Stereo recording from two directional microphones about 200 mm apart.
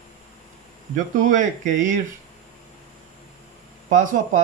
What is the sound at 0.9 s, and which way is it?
Speech, 40° right (ahead or behind).